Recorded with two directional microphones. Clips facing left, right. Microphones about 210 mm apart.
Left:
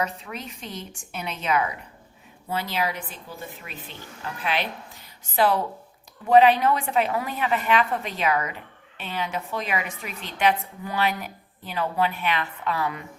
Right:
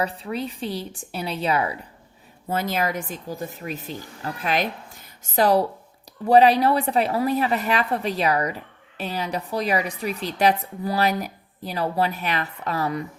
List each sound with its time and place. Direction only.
0.0 s a woman's voice: 30° right (ahead or behind)
2.5 s a woman's voice: 45° right (ahead or behind)